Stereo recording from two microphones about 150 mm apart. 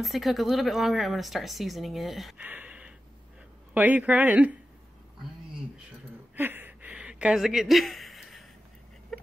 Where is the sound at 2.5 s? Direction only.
10° right (ahead or behind).